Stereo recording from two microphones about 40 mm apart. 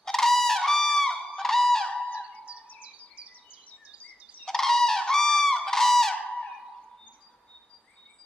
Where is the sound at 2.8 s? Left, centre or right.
Right.